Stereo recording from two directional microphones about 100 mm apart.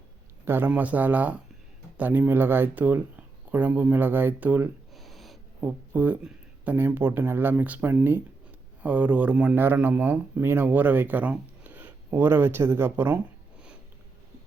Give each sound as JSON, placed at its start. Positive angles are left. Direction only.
{"t": 0.4, "sound": "a man's voice", "side_deg": -20}
{"t": 4.9, "sound": "a sound", "side_deg": 0}
{"t": 5.5, "sound": "speech", "side_deg": -15}